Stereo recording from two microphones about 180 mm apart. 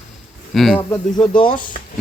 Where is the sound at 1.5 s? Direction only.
50° left (ahead or behind).